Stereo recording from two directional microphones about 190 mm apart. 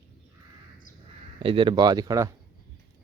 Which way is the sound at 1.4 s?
25° right (ahead or behind).